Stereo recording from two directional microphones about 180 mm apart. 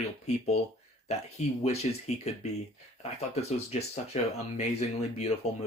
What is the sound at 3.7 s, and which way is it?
Speech, 35° left (ahead or behind).